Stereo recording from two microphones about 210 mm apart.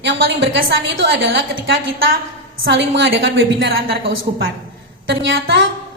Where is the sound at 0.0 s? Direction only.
60° right (ahead or behind).